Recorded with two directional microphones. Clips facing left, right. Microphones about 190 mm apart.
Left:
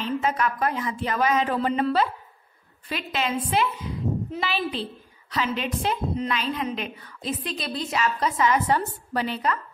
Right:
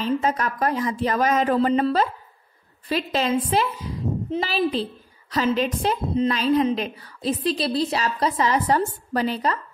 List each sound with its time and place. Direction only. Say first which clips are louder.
0.0 s a woman's voice: right 2 dB; 40° right (ahead or behind)